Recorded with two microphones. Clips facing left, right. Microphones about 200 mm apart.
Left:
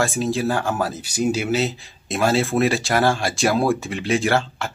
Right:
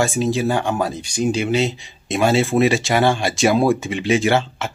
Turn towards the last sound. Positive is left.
turn(degrees=0)  # may be behind; listen again after turning